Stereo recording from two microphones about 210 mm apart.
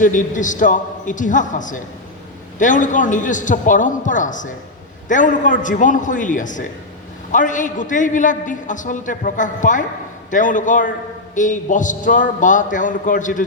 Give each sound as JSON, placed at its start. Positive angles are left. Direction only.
{"t": 0.0, "sound": "a man's voice", "side_deg": 40}